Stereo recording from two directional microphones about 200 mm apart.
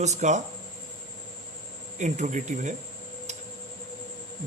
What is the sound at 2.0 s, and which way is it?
Speech, 35° right (ahead or behind).